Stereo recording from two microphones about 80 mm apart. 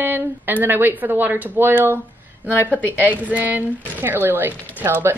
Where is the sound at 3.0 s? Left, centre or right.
Centre.